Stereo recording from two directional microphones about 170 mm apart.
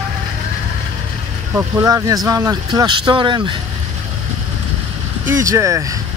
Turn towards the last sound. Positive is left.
turn(degrees=-20)  # may be behind; listen again after turning